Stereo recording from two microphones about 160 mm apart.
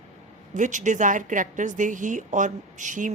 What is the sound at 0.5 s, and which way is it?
A woman's voice, 50° right (ahead or behind).